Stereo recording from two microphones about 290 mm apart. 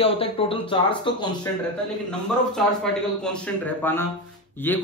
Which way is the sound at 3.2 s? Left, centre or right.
Centre.